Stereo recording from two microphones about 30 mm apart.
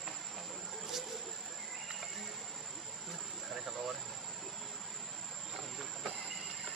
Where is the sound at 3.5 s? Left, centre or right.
Centre.